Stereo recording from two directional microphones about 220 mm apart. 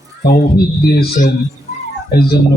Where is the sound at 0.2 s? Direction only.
45° left (ahead or behind).